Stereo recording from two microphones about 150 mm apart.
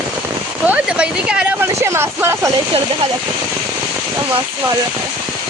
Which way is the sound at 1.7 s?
15° right (ahead or behind).